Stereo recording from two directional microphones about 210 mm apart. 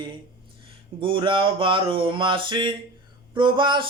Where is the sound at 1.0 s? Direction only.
25° right (ahead or behind).